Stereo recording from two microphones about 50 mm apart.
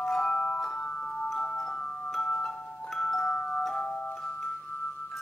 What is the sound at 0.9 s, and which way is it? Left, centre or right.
Glockenspiel, left.